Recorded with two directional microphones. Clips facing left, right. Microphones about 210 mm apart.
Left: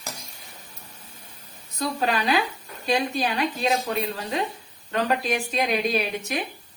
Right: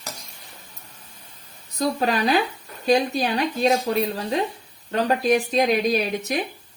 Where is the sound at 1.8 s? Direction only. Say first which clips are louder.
Right 3 dB; 40° right (ahead or behind).